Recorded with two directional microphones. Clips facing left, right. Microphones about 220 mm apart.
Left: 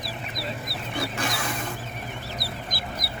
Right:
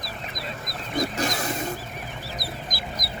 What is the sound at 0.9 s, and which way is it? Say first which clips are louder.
Wild animals: right 4 dB; 40° right (ahead or behind).